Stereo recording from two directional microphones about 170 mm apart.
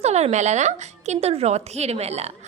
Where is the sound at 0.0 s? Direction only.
40° right (ahead or behind).